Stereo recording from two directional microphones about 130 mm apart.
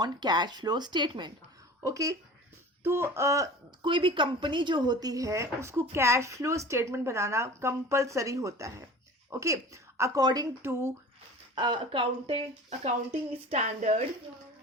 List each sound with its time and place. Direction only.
0.0 s speech: 35° right (ahead or behind)
1.8 s speech: 25° right (ahead or behind)
3.8 s speech: 40° right (ahead or behind); by 10.9 s 20° right (ahead or behind)
11.5 s speech: 35° right (ahead or behind)
13.5 s speech: 55° right (ahead or behind)